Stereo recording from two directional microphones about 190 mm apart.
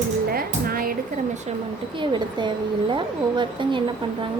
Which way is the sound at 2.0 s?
25° right (ahead or behind).